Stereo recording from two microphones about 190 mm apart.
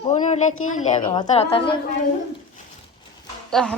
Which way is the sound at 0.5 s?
90° left.